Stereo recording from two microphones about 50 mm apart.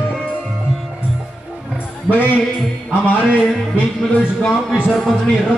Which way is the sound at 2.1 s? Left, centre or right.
Left.